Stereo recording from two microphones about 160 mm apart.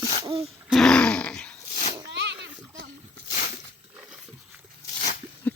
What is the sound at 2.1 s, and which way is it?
Children playing, 90° right.